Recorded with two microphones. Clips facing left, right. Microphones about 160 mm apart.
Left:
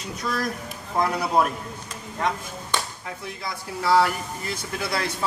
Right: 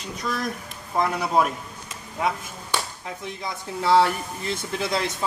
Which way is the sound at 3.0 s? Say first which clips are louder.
Right 1 dB; 20° right (ahead or behind).